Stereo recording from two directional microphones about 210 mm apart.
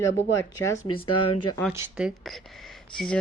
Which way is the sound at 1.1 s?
90° left.